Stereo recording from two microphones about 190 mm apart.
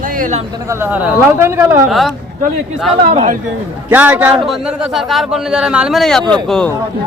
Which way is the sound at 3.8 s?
10° right (ahead or behind).